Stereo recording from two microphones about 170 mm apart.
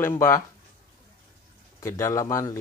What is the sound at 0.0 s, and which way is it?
Speech, 15° left (ahead or behind).